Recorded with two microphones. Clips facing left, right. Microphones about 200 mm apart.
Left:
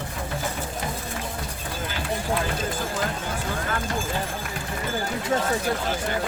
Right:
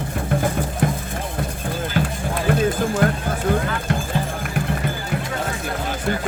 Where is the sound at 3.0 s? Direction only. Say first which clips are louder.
Right 9 dB; 60° right (ahead or behind).